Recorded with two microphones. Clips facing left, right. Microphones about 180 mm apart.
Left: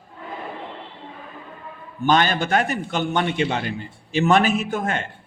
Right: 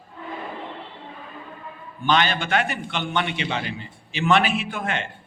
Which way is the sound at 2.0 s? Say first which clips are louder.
Left 3 dB; 45° left (ahead or behind).